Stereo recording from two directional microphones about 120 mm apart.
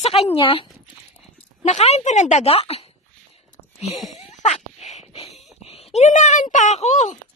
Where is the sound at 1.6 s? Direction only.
65° left (ahead or behind).